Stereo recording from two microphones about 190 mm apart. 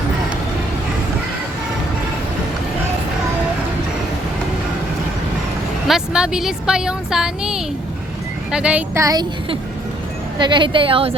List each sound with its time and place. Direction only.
5.9 s speech: 5° right (ahead or behind)
9.0 s a woman's voice: 20° right (ahead or behind)